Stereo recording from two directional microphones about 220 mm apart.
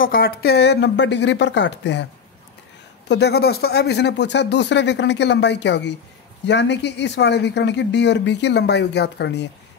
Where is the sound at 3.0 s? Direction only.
50° left (ahead or behind).